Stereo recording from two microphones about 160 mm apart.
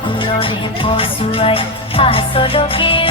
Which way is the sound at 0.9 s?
35° left (ahead or behind).